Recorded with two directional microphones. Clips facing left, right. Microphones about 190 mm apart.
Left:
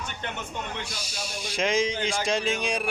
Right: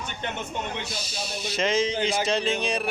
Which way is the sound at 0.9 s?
10° left (ahead or behind).